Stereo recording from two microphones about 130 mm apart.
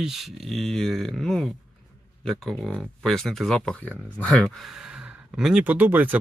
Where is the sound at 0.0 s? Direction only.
Centre (ahead or behind).